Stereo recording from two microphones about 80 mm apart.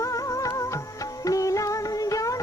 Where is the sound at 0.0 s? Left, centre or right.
Left.